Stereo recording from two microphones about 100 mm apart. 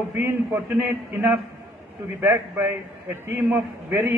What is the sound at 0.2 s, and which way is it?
A man's voice, 20° right (ahead or behind).